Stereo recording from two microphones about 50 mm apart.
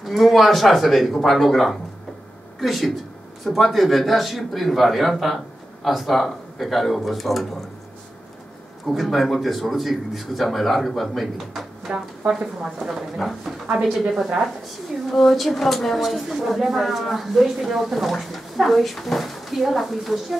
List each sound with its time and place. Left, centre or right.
0.0 s a woman's voice: centre
8.8 s a woman's voice: centre
11.9 s a woman's voice: right
12.3 s a woman's voice: centre